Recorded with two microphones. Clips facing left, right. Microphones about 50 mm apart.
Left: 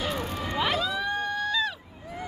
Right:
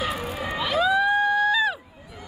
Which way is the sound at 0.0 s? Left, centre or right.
Centre.